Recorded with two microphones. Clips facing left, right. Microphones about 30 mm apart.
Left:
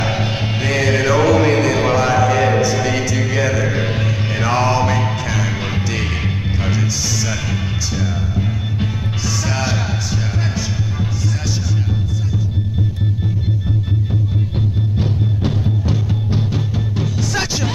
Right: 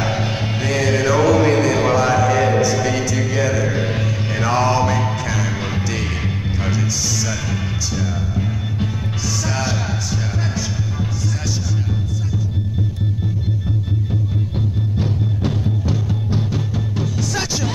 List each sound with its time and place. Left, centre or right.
0.0 s music: left
15.0 s music: centre